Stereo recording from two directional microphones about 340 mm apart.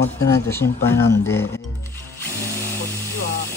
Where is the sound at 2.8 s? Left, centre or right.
Left.